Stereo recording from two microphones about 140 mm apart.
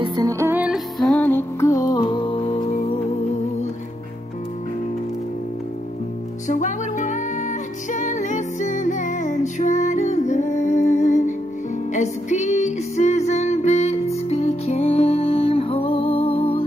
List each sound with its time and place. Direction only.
0.0 s music: 30° right (ahead or behind); by 0.7 s 10° right (ahead or behind)
0.9 s music: centre (ahead or behind)
1.2 s music: 20° left (ahead or behind); by 2.9 s 50° left (ahead or behind)
6.4 s music: 60° left (ahead or behind); by 16.6 s 45° left (ahead or behind)